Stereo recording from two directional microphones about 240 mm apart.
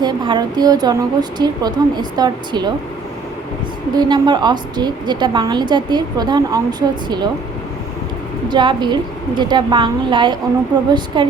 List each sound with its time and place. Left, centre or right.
0.0 s a woman's voice: centre
3.9 s a woman's voice: centre
8.4 s a woman's voice: centre